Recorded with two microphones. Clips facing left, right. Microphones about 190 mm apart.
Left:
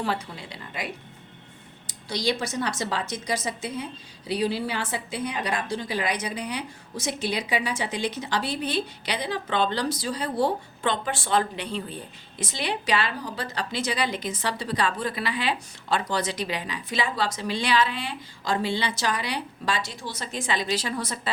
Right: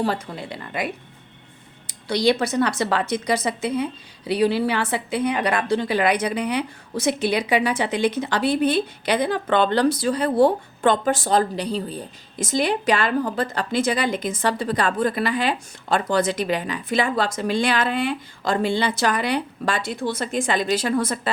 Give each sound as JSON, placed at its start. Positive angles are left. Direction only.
{"t": 0.0, "sound": "speech", "side_deg": -50}
{"t": 1.9, "sound": "a woman's voice", "side_deg": -65}